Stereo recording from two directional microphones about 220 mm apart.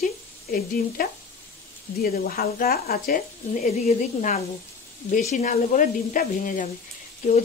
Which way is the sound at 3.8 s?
30° left (ahead or behind).